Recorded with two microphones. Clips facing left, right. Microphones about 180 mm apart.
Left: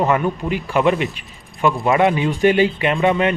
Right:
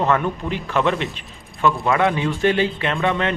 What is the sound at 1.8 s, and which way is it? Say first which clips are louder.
Speech: left 3 dB; 20° left (ahead or behind).